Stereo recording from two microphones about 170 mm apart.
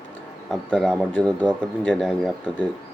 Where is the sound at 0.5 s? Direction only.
Centre (ahead or behind).